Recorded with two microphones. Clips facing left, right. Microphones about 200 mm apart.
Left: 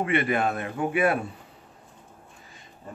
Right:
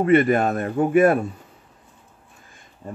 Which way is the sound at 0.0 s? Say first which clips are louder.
Right 8 dB; 45° right (ahead or behind).